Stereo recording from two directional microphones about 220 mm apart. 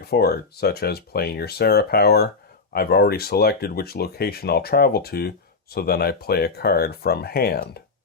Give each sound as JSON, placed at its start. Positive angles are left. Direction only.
{"t": 0.0, "sound": "speech", "side_deg": 45}